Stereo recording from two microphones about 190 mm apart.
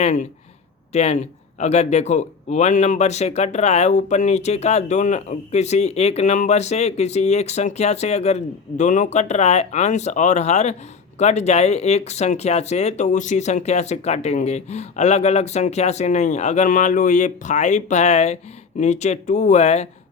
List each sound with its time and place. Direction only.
0.0 s speech: 40° left (ahead or behind)